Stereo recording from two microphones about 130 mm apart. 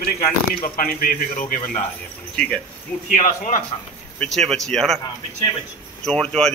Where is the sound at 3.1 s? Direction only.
75° left (ahead or behind).